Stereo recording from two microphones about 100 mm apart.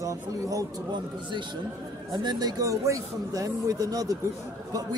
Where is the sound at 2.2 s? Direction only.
40° right (ahead or behind).